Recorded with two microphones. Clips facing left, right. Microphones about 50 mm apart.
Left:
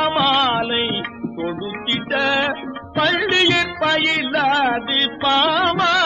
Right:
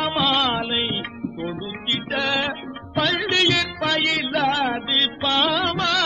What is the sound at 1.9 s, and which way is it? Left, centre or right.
Music, centre.